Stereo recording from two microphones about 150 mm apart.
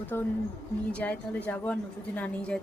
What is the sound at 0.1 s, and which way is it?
Speech, 15° left (ahead or behind).